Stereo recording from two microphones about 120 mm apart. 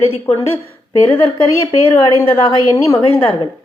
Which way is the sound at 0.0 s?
55° left (ahead or behind).